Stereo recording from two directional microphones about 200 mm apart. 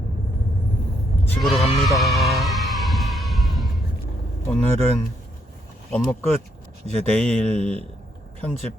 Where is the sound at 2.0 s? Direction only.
Centre (ahead or behind).